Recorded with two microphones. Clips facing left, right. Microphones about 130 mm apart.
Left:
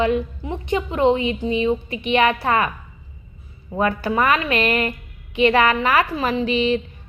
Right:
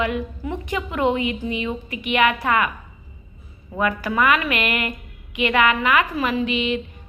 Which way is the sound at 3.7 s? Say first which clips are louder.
Left 2 dB; 30° left (ahead or behind).